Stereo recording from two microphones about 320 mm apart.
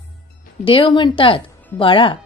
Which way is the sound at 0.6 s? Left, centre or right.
Centre.